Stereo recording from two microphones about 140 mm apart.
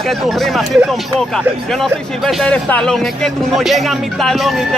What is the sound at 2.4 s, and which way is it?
Speech, 5° left (ahead or behind).